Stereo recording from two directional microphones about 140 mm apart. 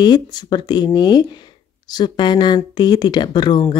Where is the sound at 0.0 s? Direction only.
30° left (ahead or behind).